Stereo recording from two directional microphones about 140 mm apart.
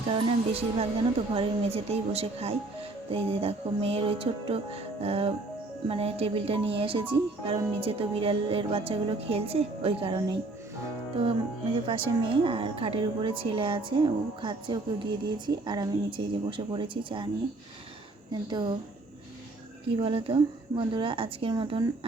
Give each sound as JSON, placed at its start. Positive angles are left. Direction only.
{"t": 0.1, "sound": "music", "side_deg": -40}
{"t": 5.9, "sound": "a woman's voice", "side_deg": -45}
{"t": 18.3, "sound": "a woman's voice", "side_deg": -30}
{"t": 20.0, "sound": "a woman's voice", "side_deg": -40}